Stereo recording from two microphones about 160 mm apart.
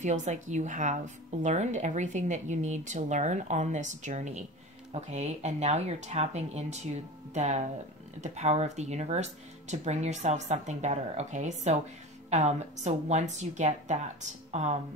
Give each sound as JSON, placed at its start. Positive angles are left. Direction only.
{"t": 0.0, "sound": "a woman's voice", "side_deg": -45}